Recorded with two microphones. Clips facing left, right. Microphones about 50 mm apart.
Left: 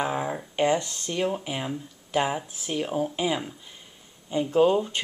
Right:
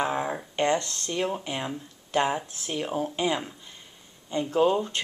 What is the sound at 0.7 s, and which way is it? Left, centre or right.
Speech, centre.